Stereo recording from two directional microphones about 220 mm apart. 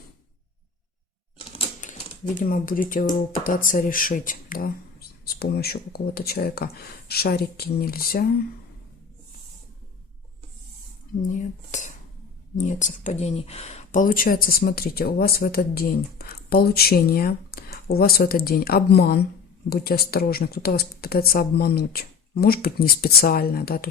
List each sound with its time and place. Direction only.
1.5 s typewriter: 35° left (ahead or behind)
3.4 s speech: 40° left (ahead or behind)
11.3 s speech: 35° left (ahead or behind)